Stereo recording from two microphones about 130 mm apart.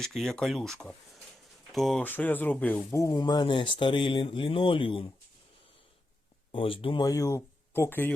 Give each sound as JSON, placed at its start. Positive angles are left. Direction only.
{"t": 0.0, "sound": "speech", "side_deg": 5}
{"t": 2.0, "sound": "speech", "side_deg": 15}
{"t": 2.9, "sound": "speech", "side_deg": 25}
{"t": 6.5, "sound": "speech", "side_deg": 45}
{"t": 7.0, "sound": "speech", "side_deg": 25}